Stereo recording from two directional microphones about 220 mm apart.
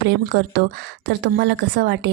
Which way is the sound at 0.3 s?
50° right (ahead or behind).